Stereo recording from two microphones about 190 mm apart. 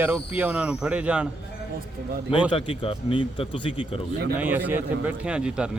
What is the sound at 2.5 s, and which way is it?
Speech, 25° left (ahead or behind).